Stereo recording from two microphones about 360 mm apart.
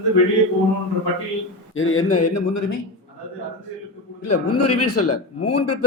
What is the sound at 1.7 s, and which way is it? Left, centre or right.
Speech, left.